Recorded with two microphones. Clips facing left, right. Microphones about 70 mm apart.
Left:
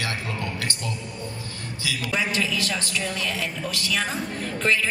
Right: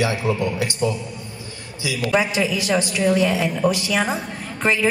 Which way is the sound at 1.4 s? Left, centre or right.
Centre.